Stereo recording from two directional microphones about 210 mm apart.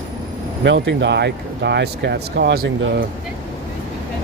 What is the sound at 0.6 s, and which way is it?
Speech, 55° right (ahead or behind).